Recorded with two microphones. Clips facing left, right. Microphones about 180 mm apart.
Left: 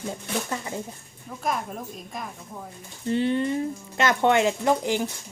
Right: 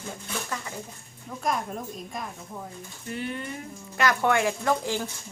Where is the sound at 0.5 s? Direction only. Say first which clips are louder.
Left 4 dB; 25° left (ahead or behind).